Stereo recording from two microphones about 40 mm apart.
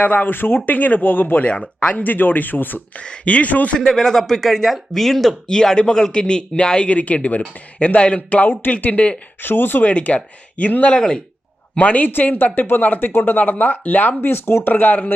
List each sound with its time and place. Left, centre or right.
0.0 s speech: left
1.5 s speech: left
1.9 s speech: left
3.0 s speech: left
3.8 s speech: centre
5.5 s speech: centre
6.9 s speech: left
9.4 s speech: left
9.8 s speech: left
10.9 s speech: left
11.8 s speech: left
14.2 s speech: left
14.6 s speech: left